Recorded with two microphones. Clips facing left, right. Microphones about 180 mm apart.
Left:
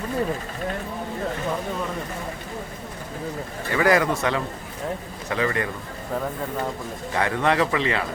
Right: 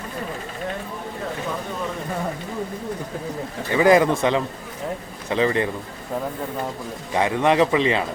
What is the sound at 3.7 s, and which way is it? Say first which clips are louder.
A man's voice: right 4 dB; 20° right (ahead or behind).